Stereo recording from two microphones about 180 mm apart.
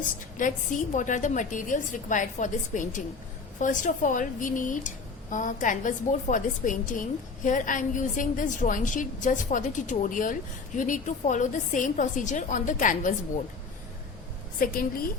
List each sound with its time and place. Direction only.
0.0 s a woman's voice: 45° left (ahead or behind)
14.6 s a woman's voice: 55° left (ahead or behind)